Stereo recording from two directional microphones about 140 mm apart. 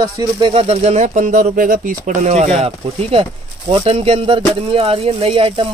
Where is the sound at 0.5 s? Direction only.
45° right (ahead or behind).